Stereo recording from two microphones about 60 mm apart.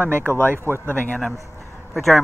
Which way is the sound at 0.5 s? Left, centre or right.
Right.